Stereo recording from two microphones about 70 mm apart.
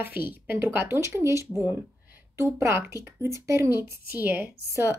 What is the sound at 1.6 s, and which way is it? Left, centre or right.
A woman's voice, right.